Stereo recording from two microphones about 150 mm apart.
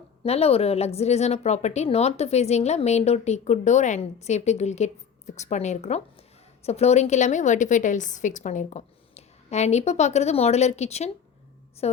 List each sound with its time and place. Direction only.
0.2 s a woman's voice: 40° left (ahead or behind)